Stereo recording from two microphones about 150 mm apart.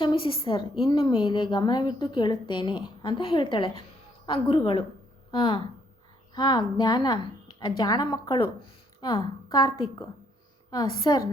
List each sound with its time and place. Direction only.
0.0 s a woman's voice: 35° left (ahead or behind)